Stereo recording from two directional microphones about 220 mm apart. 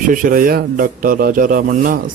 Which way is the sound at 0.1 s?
40° right (ahead or behind).